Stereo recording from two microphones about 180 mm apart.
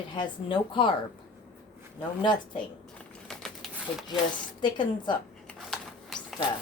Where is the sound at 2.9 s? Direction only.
Centre (ahead or behind).